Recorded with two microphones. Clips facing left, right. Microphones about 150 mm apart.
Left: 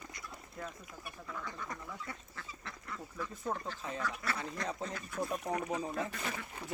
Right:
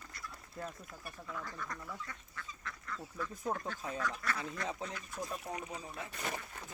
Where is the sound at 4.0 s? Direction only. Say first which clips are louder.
Even; 5° left (ahead or behind).